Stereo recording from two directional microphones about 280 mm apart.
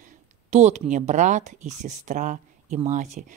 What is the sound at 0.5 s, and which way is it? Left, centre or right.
Speech, right.